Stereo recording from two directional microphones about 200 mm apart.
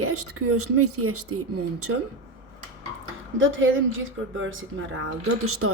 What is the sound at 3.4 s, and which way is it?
A woman's voice, 75° right (ahead or behind).